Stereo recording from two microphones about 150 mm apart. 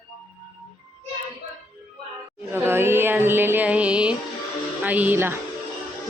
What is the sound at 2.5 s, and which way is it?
Music, 15° right (ahead or behind).